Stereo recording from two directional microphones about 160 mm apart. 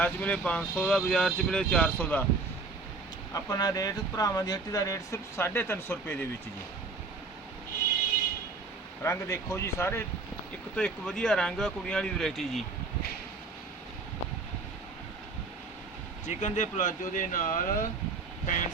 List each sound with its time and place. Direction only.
0.0 s speech: 10° left (ahead or behind)
3.3 s speech: 25° left (ahead or behind)
9.0 s speech: 20° left (ahead or behind)
10.8 s speech: 5° left (ahead or behind)
16.2 s speech: 50° left (ahead or behind)